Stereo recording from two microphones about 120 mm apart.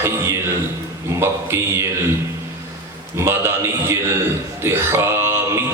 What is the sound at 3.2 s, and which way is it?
Speech, 20° right (ahead or behind).